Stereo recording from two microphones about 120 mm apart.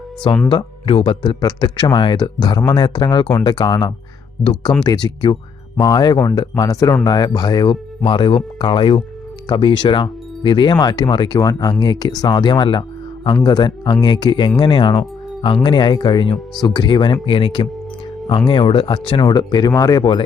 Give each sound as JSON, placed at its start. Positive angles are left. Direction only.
{"t": 0.5, "sound": "speech", "side_deg": 45}